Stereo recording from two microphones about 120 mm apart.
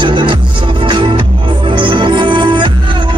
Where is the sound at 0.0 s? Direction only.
45° right (ahead or behind).